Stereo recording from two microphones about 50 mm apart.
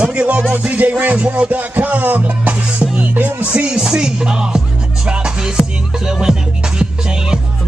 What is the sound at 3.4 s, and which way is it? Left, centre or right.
Music, right.